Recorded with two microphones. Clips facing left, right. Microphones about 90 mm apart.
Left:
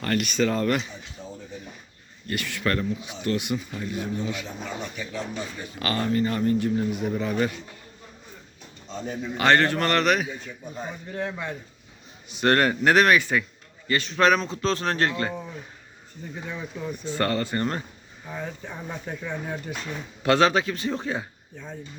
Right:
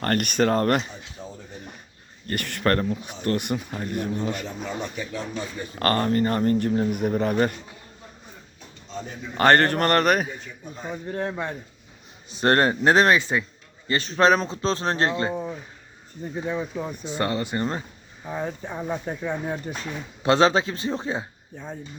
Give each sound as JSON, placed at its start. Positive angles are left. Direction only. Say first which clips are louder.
{"t": 0.0, "sound": "speech", "louder": "right 2 dB", "side_deg": -50}
{"t": 2.2, "sound": "speech", "louder": "right 3 dB", "side_deg": -50}
{"t": 5.8, "sound": "speech", "louder": "right 3 dB", "side_deg": -50}
{"t": 9.4, "sound": "a man's voice", "louder": "right 3 dB", "side_deg": -50}
{"t": 17.0, "sound": "speech", "louder": "left 2 dB", "side_deg": -20}
{"t": 18.3, "sound": "speech", "louder": "right 5 dB", "side_deg": -25}